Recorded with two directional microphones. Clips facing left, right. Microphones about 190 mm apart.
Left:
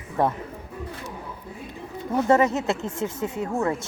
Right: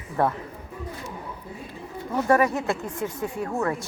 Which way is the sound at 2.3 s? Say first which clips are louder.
Left 1 dB; 25° left (ahead or behind).